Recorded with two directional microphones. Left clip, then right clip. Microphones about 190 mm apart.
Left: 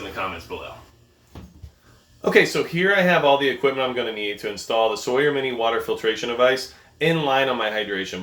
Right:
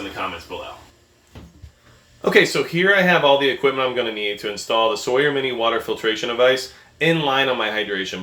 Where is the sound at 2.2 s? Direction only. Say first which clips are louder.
Right 2 dB; 10° right (ahead or behind).